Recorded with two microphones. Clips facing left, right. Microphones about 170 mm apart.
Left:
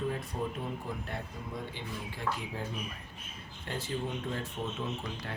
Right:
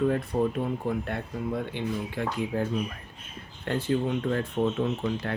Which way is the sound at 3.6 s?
60° right (ahead or behind).